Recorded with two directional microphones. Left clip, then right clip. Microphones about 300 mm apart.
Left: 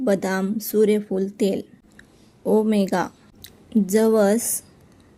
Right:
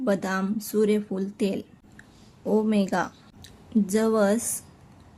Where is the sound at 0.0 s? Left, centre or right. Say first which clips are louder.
Left 4 dB; centre.